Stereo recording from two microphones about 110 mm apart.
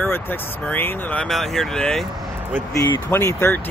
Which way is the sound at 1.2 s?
Centre (ahead or behind).